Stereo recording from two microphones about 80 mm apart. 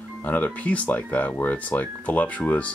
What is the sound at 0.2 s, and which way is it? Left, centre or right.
Speech, left.